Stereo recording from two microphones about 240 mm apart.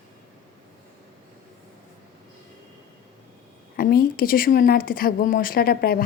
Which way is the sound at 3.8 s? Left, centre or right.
Left.